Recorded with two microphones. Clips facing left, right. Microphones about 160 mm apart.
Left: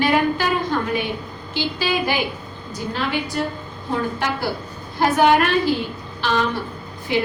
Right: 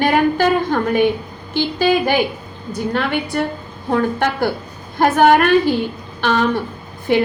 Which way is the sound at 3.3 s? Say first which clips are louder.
Right 4 dB; 60° right (ahead or behind).